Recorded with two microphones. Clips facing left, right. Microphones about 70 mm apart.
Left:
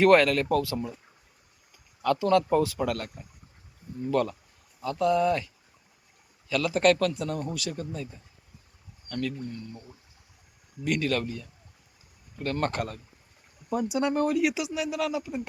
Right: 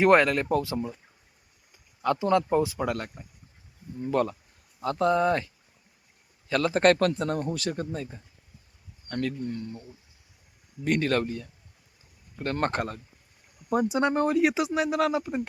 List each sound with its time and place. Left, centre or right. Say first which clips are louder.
0.0 s speech: left 1 dB; right
2.0 s speech: left 1 dB; right
6.5 s speech: right 1 dB; right
10.8 s speech: right 2 dB; right